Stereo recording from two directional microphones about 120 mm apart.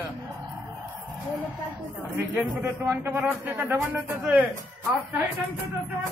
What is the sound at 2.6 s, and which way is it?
A man's voice, 25° right (ahead or behind).